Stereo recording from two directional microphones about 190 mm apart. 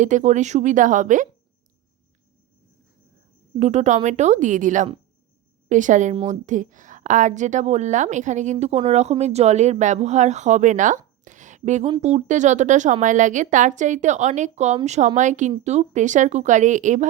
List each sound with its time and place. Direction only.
0.0 s speech: 40° right (ahead or behind)
3.6 s speech: 35° right (ahead or behind)